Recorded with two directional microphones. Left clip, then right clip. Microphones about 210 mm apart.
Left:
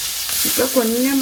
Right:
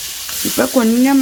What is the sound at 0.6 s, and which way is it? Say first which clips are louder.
Frying: right 4 dB; 50° right (ahead or behind).